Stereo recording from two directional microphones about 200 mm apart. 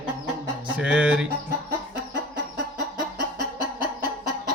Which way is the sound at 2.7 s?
20° left (ahead or behind).